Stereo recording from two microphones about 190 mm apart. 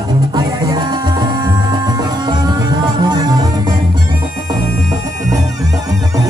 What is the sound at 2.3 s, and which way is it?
Music, 25° right (ahead or behind).